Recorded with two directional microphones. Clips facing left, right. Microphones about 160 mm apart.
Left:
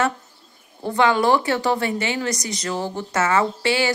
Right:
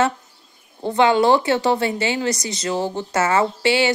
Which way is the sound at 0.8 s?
25° right (ahead or behind).